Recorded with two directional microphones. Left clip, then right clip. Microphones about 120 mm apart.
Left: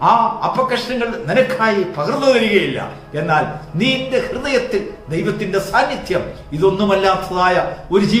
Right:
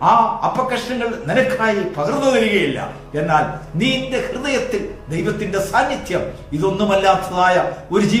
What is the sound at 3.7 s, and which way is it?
A man's voice, 25° left (ahead or behind).